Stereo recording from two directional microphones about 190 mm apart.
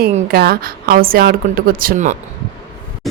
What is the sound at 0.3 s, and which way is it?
Speech, 55° right (ahead or behind).